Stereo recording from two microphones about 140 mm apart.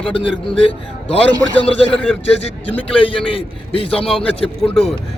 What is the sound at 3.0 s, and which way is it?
Speech, 40° left (ahead or behind).